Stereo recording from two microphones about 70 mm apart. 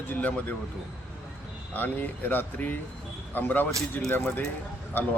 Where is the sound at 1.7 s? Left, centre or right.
Left.